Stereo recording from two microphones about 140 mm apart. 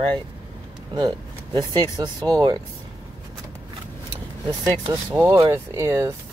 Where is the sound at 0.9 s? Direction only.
30° right (ahead or behind).